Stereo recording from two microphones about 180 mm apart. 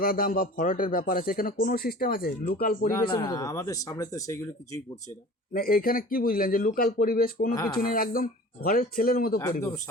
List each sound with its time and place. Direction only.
0.0 s speech: 50° left (ahead or behind)
2.9 s speech: 20° left (ahead or behind)
5.5 s speech: 55° left (ahead or behind)
7.5 s speech: 20° left (ahead or behind)
7.8 s speech: 50° left (ahead or behind)